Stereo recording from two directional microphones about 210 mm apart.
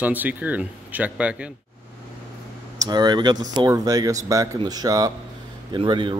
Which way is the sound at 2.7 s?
20° right (ahead or behind).